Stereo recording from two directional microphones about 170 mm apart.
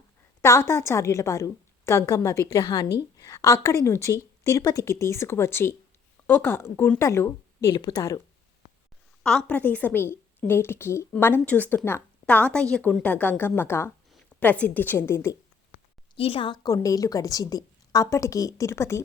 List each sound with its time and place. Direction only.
0.4 s a woman's voice: 15° left (ahead or behind)
9.2 s a woman's voice: 5° left (ahead or behind)
16.1 s a woman's voice: 35° left (ahead or behind); by 19.0 s 15° left (ahead or behind)